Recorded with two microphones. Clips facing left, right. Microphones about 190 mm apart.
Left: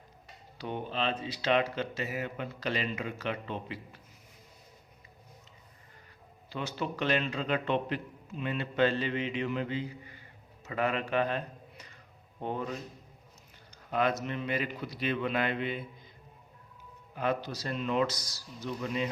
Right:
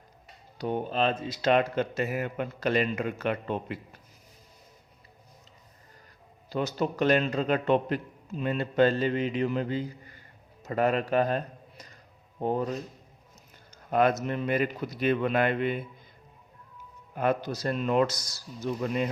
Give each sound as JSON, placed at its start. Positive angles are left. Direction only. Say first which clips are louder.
{"t": 0.6, "sound": "speech", "louder": "right 6 dB", "side_deg": -45}
{"t": 6.5, "sound": "a man's voice", "louder": "right 6 dB", "side_deg": -40}
{"t": 13.9, "sound": "speech", "louder": "right 5 dB", "side_deg": -45}
{"t": 17.2, "sound": "speech", "louder": "right 4 dB", "side_deg": -50}